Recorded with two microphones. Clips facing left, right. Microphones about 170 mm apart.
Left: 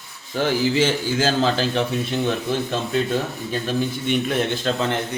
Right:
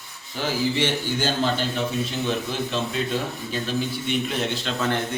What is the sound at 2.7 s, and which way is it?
A man's voice, 50° left (ahead or behind).